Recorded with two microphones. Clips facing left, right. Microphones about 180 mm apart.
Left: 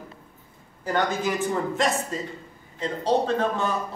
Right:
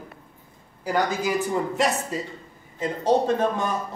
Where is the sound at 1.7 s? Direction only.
5° right (ahead or behind).